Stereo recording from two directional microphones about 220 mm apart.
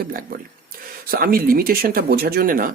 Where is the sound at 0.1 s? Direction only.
40° right (ahead or behind).